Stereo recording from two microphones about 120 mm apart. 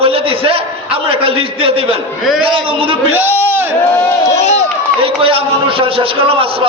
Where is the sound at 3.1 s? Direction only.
15° right (ahead or behind).